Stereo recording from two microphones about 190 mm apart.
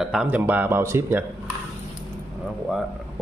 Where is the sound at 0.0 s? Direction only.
5° right (ahead or behind).